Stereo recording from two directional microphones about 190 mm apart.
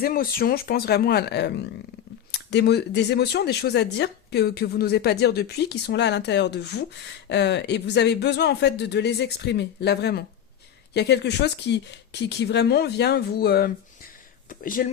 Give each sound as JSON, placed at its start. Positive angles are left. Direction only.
{"t": 0.0, "sound": "speech", "side_deg": 50}